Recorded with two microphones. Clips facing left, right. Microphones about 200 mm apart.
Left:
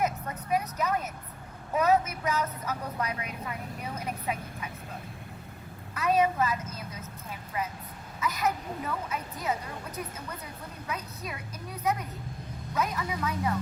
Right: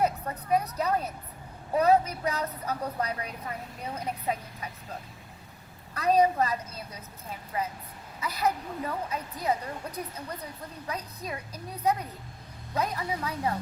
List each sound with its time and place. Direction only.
0.0 s vehicle: 35° right (ahead or behind)
1.7 s a woman's voice: 35° right (ahead or behind)
5.9 s a woman's voice: 35° right (ahead or behind)
8.2 s a woman's voice: 30° right (ahead or behind)